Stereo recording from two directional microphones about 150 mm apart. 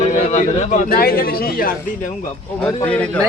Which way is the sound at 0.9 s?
80° left.